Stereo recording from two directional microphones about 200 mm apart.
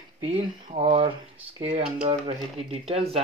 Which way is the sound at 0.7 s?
25° right (ahead or behind).